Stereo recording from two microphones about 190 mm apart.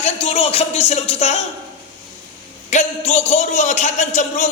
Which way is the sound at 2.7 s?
40° left (ahead or behind).